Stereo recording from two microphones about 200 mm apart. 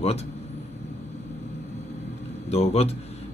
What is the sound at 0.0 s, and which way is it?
Speech, 30° left (ahead or behind).